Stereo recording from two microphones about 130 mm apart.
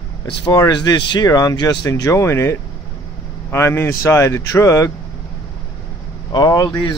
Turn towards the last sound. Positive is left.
turn(degrees=25)  # may be behind; listen again after turning